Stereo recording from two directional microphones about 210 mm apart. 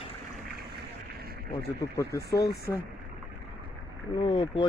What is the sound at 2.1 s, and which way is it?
Speech, 50° left (ahead or behind).